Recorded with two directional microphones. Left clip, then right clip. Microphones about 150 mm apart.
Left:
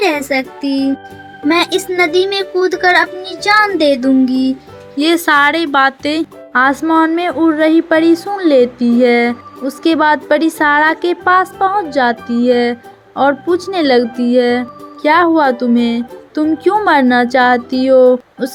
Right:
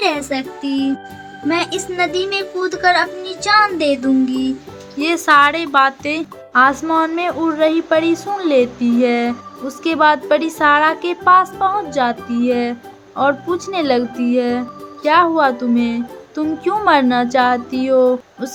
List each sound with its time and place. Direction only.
1.5 s speech: 35° left (ahead or behind)
15.7 s music: 30° left (ahead or behind)
16.6 s speech: 30° left (ahead or behind)